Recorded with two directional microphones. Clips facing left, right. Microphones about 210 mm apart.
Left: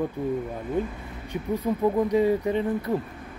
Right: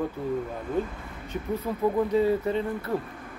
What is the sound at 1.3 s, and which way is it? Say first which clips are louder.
Speech: left 3 dB; 15° left (ahead or behind).